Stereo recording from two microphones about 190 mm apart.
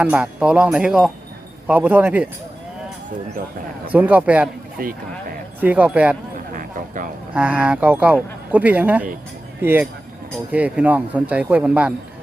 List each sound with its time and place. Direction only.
0.0 s speech: 5° right (ahead or behind)
3.9 s speech: 10° right (ahead or behind)
4.8 s speech: 50° right (ahead or behind)
5.5 s speech: 10° right (ahead or behind)
6.5 s a sound: 45° right (ahead or behind)
7.3 s speech: 5° right (ahead or behind)